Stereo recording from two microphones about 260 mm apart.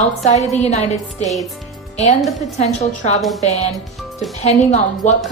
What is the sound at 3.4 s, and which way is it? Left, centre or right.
A woman's voice, left.